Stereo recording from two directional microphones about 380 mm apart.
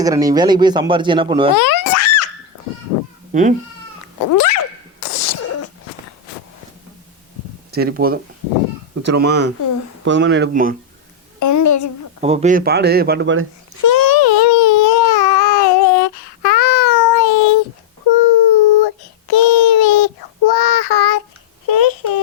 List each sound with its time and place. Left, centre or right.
0.0 s speech: centre
1.5 s a sound: left
3.3 s speech: centre
4.3 s sneeze: left
7.7 s speech: right
11.3 s a sound: left
12.2 s speech: centre
13.8 s baby cry: left
18.0 s child singing: left
21.7 s a sound: left